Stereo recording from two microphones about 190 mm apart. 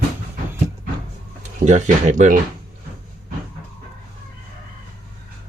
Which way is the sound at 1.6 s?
40° right (ahead or behind).